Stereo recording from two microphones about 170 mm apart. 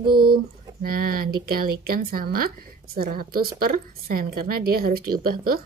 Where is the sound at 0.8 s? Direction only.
60° right (ahead or behind).